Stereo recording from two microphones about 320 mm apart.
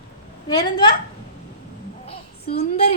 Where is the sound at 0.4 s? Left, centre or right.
Centre.